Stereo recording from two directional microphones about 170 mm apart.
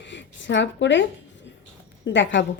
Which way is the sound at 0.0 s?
90° left.